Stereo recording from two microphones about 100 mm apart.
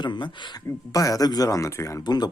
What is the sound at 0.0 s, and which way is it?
Speech, 50° left (ahead or behind).